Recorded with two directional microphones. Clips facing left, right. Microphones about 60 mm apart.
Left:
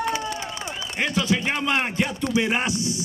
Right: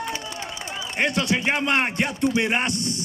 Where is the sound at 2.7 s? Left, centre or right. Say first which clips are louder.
Left 1 dB; right.